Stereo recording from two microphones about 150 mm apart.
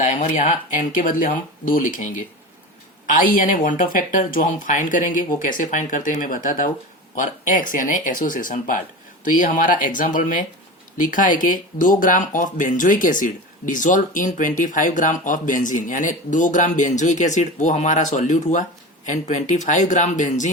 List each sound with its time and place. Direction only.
0.0 s speech: 55° left (ahead or behind)